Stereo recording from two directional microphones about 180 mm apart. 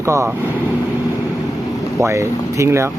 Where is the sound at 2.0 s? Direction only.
15° right (ahead or behind).